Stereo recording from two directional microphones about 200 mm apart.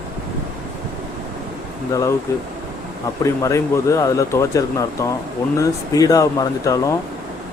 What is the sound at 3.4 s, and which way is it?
Speech, 15° left (ahead or behind).